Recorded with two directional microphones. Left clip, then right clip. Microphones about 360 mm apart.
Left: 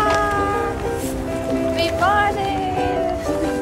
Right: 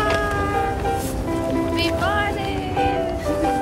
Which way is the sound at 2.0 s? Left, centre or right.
Centre.